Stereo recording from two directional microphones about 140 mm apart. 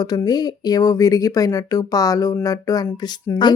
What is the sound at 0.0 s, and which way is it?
Speech, 30° left (ahead or behind).